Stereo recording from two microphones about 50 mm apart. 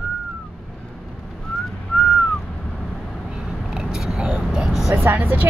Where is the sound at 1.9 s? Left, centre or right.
Left.